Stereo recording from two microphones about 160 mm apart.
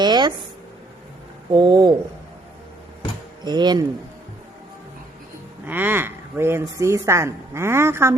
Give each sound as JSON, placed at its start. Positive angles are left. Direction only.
{"t": 0.0, "sound": "a sound", "side_deg": -25}
{"t": 1.5, "sound": "speech", "side_deg": -25}
{"t": 3.4, "sound": "speech", "side_deg": -25}
{"t": 5.6, "sound": "speech", "side_deg": -10}